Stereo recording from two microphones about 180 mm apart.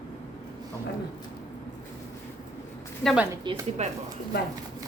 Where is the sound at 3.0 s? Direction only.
Centre (ahead or behind).